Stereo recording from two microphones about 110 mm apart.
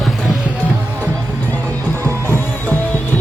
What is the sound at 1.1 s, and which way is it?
Music, 15° left (ahead or behind).